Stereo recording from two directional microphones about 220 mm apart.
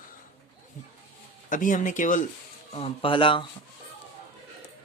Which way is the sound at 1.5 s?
35° left (ahead or behind).